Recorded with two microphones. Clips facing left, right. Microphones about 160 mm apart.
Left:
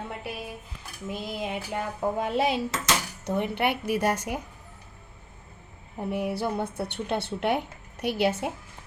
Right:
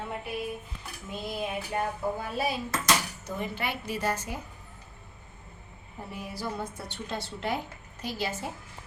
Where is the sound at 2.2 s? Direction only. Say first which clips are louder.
Left 6 dB; 85° left.